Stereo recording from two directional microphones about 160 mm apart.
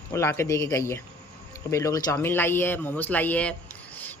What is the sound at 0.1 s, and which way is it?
Speech, 15° left (ahead or behind).